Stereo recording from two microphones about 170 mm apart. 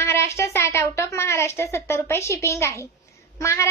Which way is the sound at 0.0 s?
15° left (ahead or behind).